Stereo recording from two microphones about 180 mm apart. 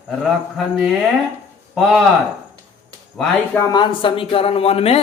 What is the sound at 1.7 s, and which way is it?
Speech, centre (ahead or behind).